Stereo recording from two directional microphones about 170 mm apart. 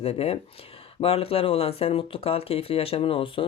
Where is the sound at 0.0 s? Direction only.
35° left (ahead or behind).